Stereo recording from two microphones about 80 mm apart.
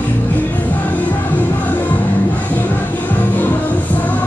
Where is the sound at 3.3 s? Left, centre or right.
Left.